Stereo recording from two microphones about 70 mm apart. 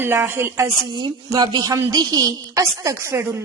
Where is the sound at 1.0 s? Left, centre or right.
Right.